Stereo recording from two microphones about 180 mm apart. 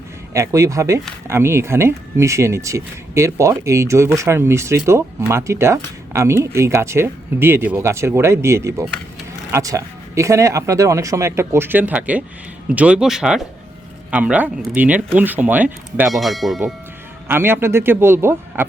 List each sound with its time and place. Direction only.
0.3 s speech: 15° right (ahead or behind); by 16.6 s centre (ahead or behind)
17.2 s speech: 10° right (ahead or behind)